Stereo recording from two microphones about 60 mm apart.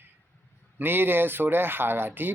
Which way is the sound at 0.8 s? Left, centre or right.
Right.